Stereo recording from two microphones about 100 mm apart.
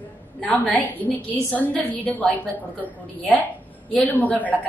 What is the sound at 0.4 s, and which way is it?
A woman's voice, 15° left (ahead or behind).